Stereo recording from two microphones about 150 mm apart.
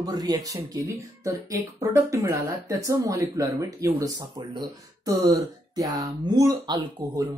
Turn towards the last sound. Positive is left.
turn(degrees=-30)  # may be behind; listen again after turning